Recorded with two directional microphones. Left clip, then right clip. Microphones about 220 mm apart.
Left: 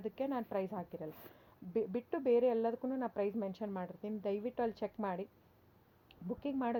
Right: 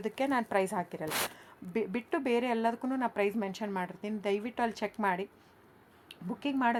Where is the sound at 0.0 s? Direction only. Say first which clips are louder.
Right 8 dB; 15° right (ahead or behind).